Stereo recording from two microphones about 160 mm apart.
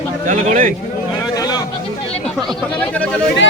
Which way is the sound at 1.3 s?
25° left (ahead or behind).